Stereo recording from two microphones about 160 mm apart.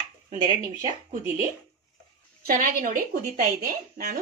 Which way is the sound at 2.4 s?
60° right (ahead or behind).